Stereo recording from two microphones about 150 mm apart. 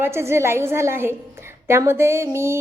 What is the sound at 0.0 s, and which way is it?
A woman's voice, 15° right (ahead or behind).